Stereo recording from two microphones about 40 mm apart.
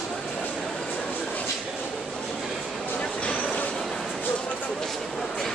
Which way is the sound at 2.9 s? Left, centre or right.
Left.